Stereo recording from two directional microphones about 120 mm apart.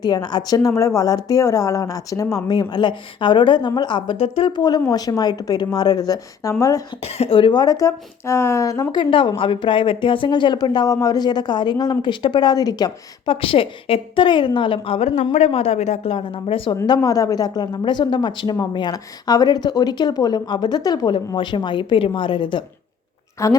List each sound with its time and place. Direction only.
0.0 s speech: 35° left (ahead or behind); by 4.5 s 50° left (ahead or behind)
4.5 s speech: 35° left (ahead or behind)
7.0 s speech: 55° left (ahead or behind); by 9.0 s 25° left (ahead or behind)
9.0 s speech: 45° left (ahead or behind)
13.2 s a woman's voice: 50° left (ahead or behind)
15.0 s a woman's voice: 75° left (ahead or behind); by 16.7 s 50° left (ahead or behind)
16.8 s speech: 35° left (ahead or behind)
23.4 s a woman's voice: 25° left (ahead or behind)